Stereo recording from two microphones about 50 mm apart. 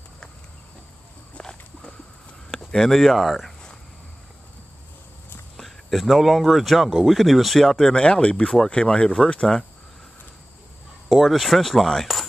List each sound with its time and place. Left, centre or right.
1.4 s walk: centre
2.7 s speech: centre
5.6 s speech: centre
7.7 s speech: centre
11.1 s speech: centre